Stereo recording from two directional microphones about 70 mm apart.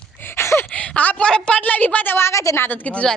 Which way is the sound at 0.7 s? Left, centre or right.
Centre.